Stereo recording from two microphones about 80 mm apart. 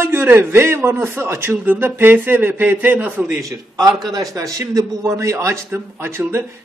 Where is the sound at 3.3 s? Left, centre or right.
Right.